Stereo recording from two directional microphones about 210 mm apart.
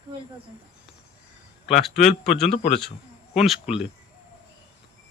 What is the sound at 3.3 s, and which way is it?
Speech, centre (ahead or behind).